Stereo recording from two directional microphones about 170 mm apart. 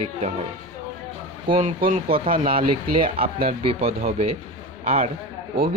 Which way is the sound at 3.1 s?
35° right (ahead or behind).